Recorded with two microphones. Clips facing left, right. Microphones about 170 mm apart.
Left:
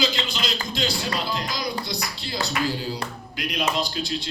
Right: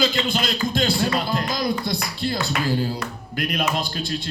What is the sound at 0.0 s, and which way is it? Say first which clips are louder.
A man's voice: right 4 dB; 50° right (ahead or behind).